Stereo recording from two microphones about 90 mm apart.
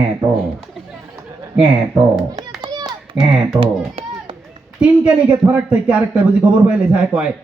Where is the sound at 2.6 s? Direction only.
50° right (ahead or behind).